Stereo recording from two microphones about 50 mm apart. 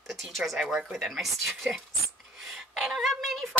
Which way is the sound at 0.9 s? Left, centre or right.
Centre.